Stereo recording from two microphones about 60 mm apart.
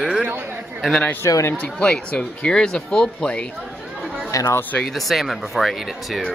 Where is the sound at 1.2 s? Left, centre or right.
Left.